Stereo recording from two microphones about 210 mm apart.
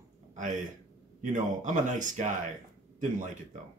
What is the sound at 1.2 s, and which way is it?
Speech, 35° right (ahead or behind).